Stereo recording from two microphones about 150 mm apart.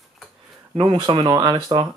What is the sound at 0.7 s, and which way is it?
Speech, 35° right (ahead or behind).